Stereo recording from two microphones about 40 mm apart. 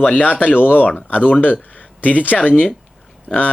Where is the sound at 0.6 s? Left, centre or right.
Left.